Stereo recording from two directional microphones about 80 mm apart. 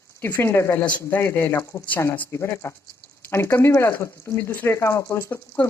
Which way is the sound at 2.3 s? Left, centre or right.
Left.